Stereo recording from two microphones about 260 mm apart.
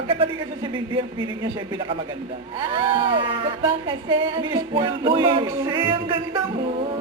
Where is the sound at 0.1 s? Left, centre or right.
Centre.